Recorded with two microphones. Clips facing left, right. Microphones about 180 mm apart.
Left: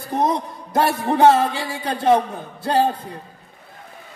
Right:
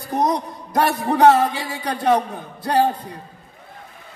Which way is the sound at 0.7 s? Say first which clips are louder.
Even; 25° left (ahead or behind).